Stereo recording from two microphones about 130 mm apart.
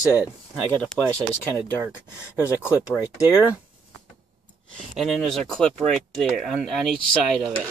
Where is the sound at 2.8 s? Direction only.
5° right (ahead or behind).